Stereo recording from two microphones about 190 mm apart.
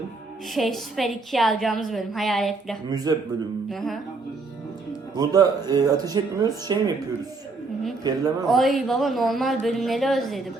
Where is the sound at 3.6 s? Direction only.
Centre (ahead or behind).